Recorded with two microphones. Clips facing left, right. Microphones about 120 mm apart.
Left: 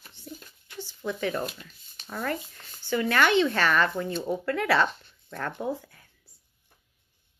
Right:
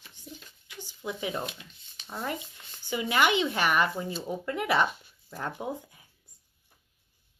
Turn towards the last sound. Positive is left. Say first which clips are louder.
# left 4 dB
turn(degrees=-15)  # may be behind; listen again after turning